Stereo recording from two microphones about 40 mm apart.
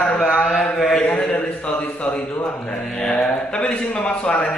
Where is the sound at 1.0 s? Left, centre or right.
Left.